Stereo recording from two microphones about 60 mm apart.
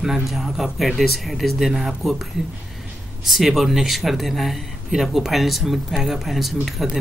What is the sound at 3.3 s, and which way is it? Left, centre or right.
Speech, centre.